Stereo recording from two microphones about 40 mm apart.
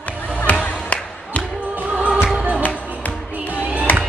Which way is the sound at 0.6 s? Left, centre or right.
Left.